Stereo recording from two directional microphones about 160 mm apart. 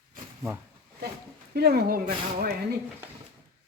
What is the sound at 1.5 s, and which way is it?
Speech, 85° right.